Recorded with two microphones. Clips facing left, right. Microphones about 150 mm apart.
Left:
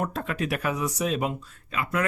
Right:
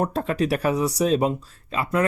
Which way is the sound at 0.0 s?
35° right (ahead or behind).